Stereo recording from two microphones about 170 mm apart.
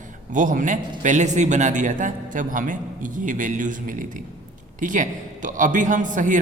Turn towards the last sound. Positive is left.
turn(degrees=-50)  # may be behind; listen again after turning